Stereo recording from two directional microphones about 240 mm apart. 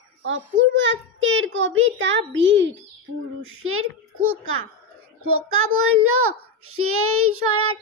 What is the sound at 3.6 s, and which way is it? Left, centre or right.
A child's voice, right.